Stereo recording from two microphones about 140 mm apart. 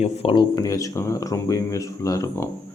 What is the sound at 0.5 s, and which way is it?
Speech, 25° left (ahead or behind).